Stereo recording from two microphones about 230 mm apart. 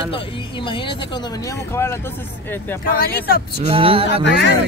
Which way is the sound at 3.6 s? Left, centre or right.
Right.